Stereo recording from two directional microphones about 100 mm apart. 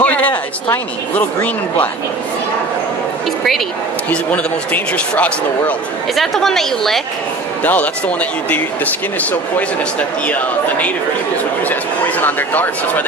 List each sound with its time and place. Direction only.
0.0 s a sound: 15° left (ahead or behind)
1.1 s speech: 15° left (ahead or behind)
4.1 s speech: 15° left (ahead or behind)
6.1 s a woman's voice: 5° left (ahead or behind)
7.6 s speech: 15° left (ahead or behind)
11.7 s speech: 20° left (ahead or behind)